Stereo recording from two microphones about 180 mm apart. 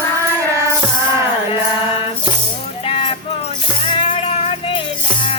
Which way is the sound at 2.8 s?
30° left (ahead or behind).